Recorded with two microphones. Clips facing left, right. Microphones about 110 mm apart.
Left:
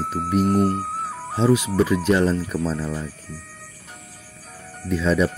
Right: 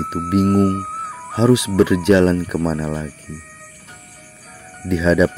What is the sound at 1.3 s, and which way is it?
Speech, 90° right.